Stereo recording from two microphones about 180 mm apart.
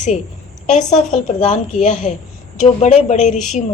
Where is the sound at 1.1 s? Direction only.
40° left (ahead or behind).